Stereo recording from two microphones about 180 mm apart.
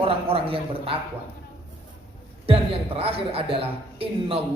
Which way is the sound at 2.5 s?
30° right (ahead or behind).